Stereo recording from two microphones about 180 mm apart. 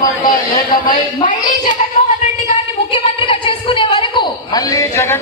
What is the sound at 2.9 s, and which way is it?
A woman's voice, 30° left (ahead or behind).